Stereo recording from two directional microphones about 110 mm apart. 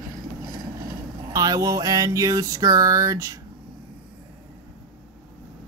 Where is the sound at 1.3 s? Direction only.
35° right (ahead or behind).